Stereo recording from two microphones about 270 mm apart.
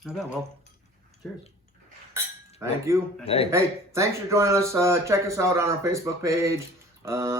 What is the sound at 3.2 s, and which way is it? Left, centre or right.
Speech, left.